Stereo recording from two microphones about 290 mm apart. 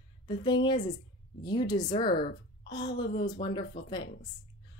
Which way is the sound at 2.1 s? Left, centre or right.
Left.